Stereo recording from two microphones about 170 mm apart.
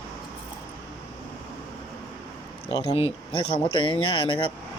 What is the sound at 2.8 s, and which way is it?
Speech, 35° left (ahead or behind).